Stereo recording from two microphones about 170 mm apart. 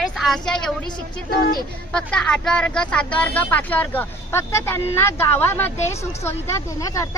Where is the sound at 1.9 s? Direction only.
5° left (ahead or behind).